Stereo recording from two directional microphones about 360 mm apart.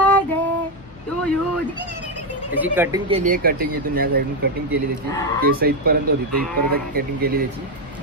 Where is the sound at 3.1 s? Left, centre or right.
Right.